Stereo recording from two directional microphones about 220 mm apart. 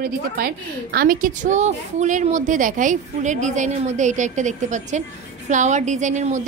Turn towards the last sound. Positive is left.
turn(degrees=-35)  # may be behind; listen again after turning